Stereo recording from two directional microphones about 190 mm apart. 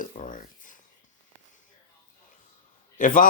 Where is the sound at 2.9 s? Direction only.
45° left (ahead or behind).